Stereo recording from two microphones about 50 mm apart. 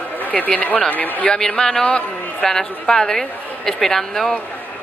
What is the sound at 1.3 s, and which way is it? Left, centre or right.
A woman's voice, centre.